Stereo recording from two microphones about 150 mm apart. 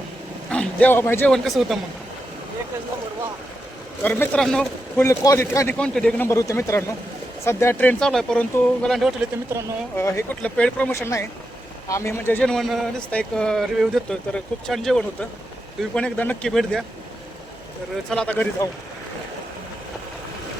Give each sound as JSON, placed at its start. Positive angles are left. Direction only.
{"t": 0.5, "sound": "a man's voice", "side_deg": 5}
{"t": 1.5, "sound": "speech", "side_deg": 0}
{"t": 4.0, "sound": "speech", "side_deg": 10}
{"t": 5.0, "sound": "speech", "side_deg": 20}
{"t": 6.2, "sound": "speech", "side_deg": 20}
{"t": 9.5, "sound": "speech", "side_deg": -20}
{"t": 10.0, "sound": "speech", "side_deg": 20}
{"t": 18.1, "sound": "speech", "side_deg": 10}